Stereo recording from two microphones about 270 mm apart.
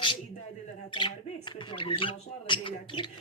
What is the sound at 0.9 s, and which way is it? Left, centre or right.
Music, centre.